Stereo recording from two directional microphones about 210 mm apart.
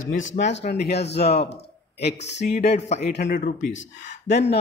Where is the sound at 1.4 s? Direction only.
50° left (ahead or behind).